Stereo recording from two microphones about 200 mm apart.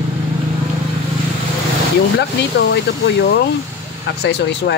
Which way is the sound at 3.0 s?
55° left (ahead or behind).